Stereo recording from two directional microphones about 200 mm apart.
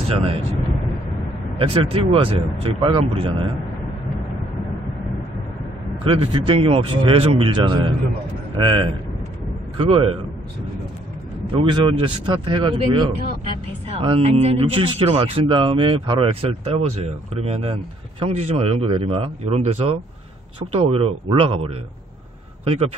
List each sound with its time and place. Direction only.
0.2 s speech: 30° right (ahead or behind)
6.1 s speech: 25° right (ahead or behind)
11.7 s speech: 25° right (ahead or behind)